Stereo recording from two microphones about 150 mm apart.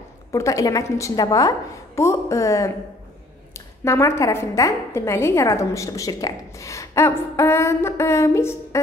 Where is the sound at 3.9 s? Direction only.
20° left (ahead or behind).